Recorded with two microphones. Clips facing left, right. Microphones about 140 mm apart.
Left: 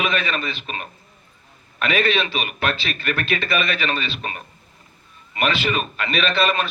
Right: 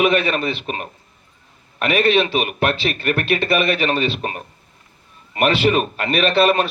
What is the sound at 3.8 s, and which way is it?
Speech, 45° right (ahead or behind).